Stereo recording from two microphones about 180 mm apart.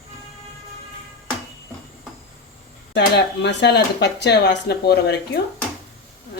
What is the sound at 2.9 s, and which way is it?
Speech, 70° left (ahead or behind).